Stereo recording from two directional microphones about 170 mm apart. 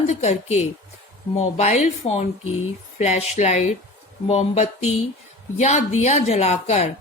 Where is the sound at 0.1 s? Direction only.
40° left (ahead or behind).